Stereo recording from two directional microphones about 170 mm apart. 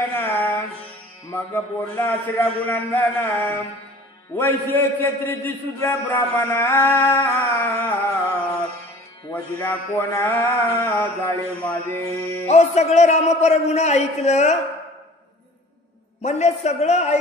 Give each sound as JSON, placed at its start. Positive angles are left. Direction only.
{"t": 0.1, "sound": "music", "side_deg": 10}
{"t": 1.3, "sound": "a man's voice", "side_deg": 15}
{"t": 12.4, "sound": "a man's voice", "side_deg": 40}
{"t": 16.2, "sound": "a man's voice", "side_deg": 40}